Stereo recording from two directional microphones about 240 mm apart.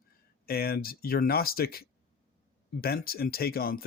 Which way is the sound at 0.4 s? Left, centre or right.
Left.